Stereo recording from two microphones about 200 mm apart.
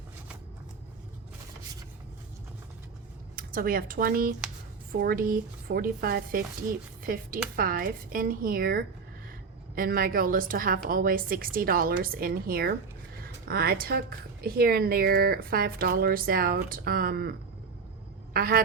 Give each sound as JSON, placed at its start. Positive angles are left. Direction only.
{"t": 3.3, "sound": "speech", "side_deg": -45}
{"t": 18.3, "sound": "speech", "side_deg": -45}